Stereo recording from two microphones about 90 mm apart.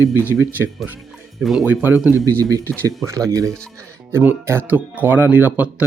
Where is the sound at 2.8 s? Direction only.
35° right (ahead or behind).